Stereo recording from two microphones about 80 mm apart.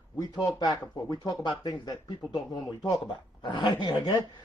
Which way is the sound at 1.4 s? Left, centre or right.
Left.